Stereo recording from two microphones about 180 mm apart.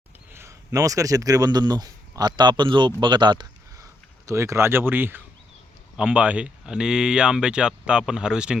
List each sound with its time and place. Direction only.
0.3 s speech: 15° right (ahead or behind)